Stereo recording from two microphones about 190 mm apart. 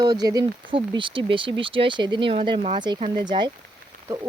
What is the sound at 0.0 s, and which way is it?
Speech, 20° right (ahead or behind).